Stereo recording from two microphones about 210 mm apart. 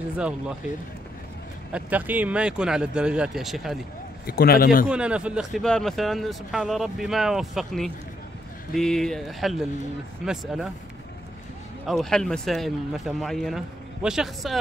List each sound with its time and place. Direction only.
1.7 s speech: 5° right (ahead or behind)
4.3 s speech: 45° left (ahead or behind)
4.8 s speech: 5° right (ahead or behind)
11.8 s speech: centre (ahead or behind)